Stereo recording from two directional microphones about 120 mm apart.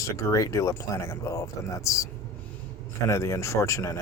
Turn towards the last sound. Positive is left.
turn(degrees=25)  # may be behind; listen again after turning